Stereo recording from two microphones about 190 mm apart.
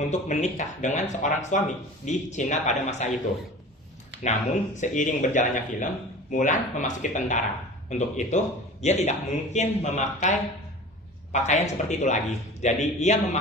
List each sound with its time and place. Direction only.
0.1 s speech: 40° left (ahead or behind)
4.2 s speech: 40° left (ahead or behind)